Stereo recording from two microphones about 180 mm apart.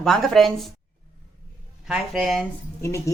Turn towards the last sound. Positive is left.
turn(degrees=15)  # may be behind; listen again after turning